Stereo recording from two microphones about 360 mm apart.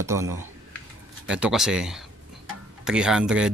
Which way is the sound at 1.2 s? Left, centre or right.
Centre.